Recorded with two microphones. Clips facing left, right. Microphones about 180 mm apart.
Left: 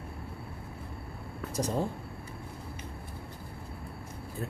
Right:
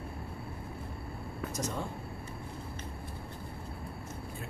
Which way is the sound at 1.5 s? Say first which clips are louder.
Left 7 dB; 35° left (ahead or behind).